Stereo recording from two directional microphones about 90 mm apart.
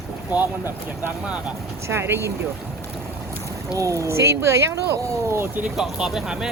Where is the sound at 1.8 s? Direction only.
30° right (ahead or behind).